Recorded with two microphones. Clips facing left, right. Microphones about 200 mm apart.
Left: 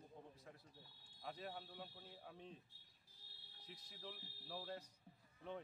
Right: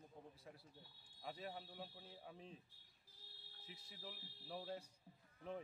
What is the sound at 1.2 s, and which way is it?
Speech, 5° right (ahead or behind).